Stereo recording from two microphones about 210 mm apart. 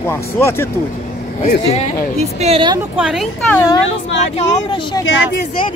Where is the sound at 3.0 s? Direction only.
5° right (ahead or behind).